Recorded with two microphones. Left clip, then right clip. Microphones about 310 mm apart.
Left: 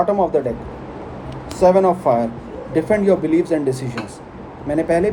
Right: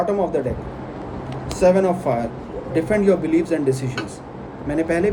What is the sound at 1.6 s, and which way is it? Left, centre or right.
Speech, centre.